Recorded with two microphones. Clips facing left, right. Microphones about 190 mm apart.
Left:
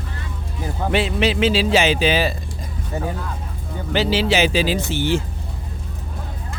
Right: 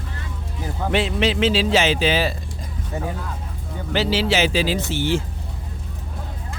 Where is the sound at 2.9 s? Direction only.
40° left (ahead or behind).